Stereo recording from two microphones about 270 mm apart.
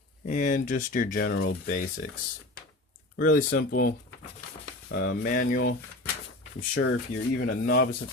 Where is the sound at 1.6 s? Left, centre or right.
Left.